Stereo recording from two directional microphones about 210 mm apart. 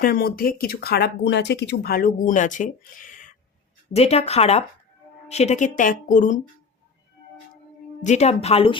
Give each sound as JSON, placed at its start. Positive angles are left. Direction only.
{"t": 0.0, "sound": "speech", "side_deg": 45}
{"t": 8.0, "sound": "speech", "side_deg": 35}